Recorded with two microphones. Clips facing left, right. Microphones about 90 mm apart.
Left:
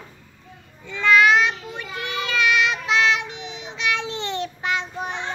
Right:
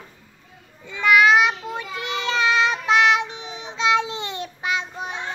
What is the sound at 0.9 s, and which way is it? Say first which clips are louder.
Child singing: right 1 dB; 15° right (ahead or behind).